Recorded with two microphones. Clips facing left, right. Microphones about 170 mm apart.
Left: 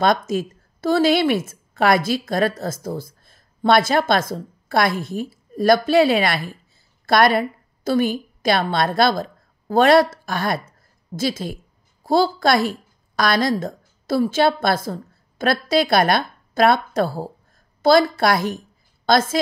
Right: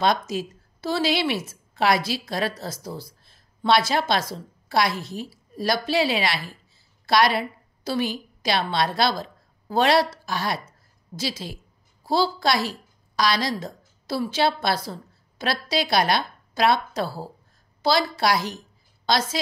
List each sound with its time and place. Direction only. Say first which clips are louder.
0.0 s a woman's voice: left 4 dB; 50° left (ahead or behind)